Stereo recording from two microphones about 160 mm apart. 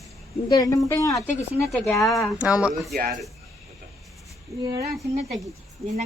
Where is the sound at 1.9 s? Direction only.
Centre (ahead or behind).